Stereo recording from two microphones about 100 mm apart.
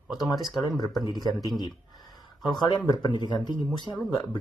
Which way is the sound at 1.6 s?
45° left (ahead or behind).